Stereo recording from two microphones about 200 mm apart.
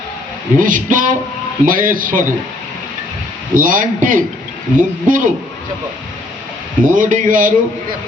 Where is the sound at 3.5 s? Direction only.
45° right (ahead or behind).